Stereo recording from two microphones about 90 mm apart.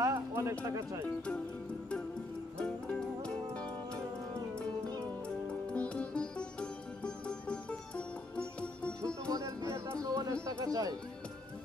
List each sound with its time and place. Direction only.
0.0 s a sound: 35° right (ahead or behind)
0.7 s speech: 35° right (ahead or behind)
2.6 s music: 10° left (ahead or behind)
5.5 s music: 15° left (ahead or behind)
9.3 s music: 35° right (ahead or behind)
10.4 s a sound: 45° right (ahead or behind)